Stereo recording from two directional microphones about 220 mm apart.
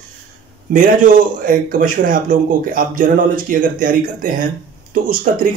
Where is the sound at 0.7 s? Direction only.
35° right (ahead or behind).